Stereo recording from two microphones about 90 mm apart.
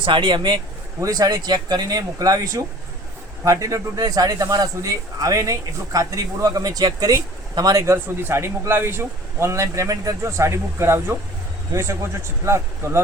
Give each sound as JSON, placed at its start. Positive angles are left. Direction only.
{"t": 0.0, "sound": "speech", "side_deg": -65}
{"t": 0.9, "sound": "speech", "side_deg": -40}
{"t": 7.9, "sound": "a man's voice", "side_deg": -25}